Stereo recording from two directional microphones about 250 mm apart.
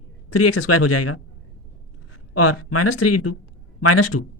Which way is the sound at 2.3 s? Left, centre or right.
Left.